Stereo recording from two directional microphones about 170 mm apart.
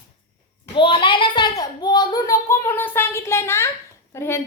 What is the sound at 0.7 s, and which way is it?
A child's voice, 30° left (ahead or behind).